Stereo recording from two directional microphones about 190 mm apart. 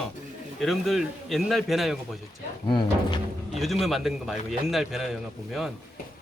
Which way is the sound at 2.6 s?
25° left (ahead or behind).